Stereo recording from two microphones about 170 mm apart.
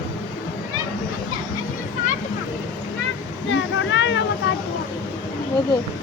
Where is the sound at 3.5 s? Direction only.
90° left.